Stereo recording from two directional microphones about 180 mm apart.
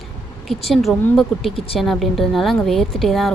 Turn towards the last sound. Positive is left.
turn(degrees=0)  # may be behind; listen again after turning